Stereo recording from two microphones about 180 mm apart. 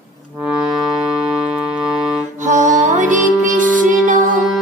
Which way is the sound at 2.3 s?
45° right (ahead or behind).